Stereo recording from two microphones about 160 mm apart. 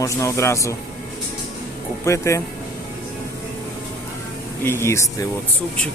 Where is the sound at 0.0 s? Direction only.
20° left (ahead or behind).